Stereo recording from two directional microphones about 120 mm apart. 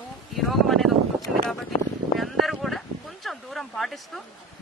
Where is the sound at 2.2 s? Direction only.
Centre (ahead or behind).